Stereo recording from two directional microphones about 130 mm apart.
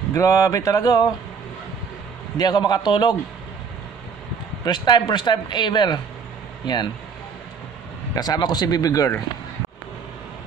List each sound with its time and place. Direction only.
0.1 s speech: 25° left (ahead or behind)
2.3 s speech: 30° left (ahead or behind)
4.6 s speech: 35° left (ahead or behind)
8.1 s speech: 30° left (ahead or behind)